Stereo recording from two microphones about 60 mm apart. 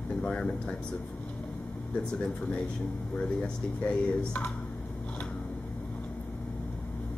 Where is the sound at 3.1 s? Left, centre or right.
Centre.